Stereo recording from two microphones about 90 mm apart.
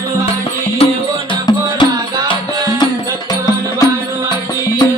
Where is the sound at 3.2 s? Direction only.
45° left (ahead or behind).